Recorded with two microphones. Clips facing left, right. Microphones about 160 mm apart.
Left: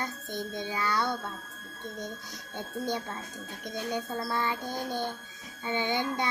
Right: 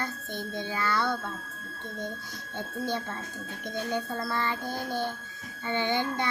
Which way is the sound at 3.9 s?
15° left (ahead or behind).